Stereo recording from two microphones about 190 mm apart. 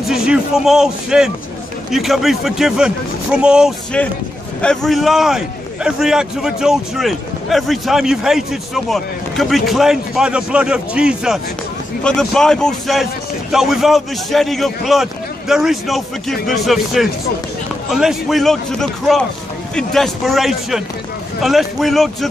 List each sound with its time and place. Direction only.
0.1 s a man's voice: 5° right (ahead or behind)